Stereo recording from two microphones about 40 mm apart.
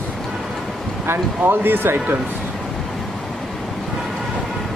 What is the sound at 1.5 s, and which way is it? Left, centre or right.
Speech, right.